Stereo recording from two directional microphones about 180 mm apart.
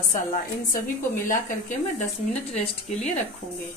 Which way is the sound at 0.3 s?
45° left (ahead or behind).